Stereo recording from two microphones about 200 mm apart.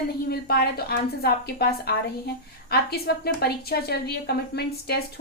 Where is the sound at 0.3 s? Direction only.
50° left (ahead or behind).